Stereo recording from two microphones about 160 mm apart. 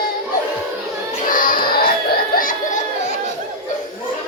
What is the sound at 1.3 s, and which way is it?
Belly laugh, 60° left (ahead or behind).